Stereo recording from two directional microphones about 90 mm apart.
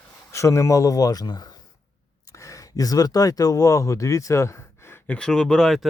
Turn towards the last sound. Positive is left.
turn(degrees=0)  # may be behind; listen again after turning